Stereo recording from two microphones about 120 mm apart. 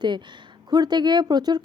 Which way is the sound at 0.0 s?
40° right (ahead or behind).